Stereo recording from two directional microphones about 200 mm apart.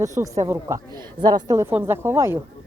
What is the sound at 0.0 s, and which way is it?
Speech, 15° right (ahead or behind).